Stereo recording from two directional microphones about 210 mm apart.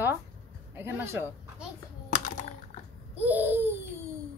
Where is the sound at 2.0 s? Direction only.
35° left (ahead or behind).